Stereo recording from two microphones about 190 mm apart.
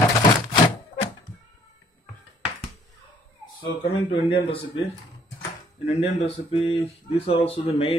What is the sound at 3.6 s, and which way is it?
Speech, 25° left (ahead or behind).